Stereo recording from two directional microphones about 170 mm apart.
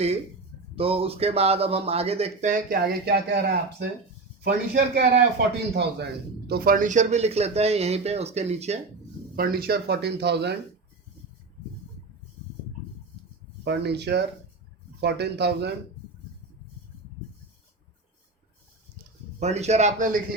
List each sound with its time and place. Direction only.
0.8 s speech: 35° right (ahead or behind)
2.8 s speech: 70° right (ahead or behind)
5.7 s speech: 75° right (ahead or behind)
6.5 s speech: 55° right (ahead or behind); by 8.8 s 40° right (ahead or behind)
9.3 s speech: 60° right (ahead or behind); by 10.5 s 80° right
13.7 s speech: 80° right
19.4 s speech: 40° right (ahead or behind)